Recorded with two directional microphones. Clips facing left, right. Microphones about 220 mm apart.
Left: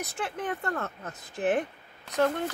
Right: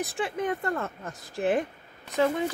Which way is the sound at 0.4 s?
10° right (ahead or behind).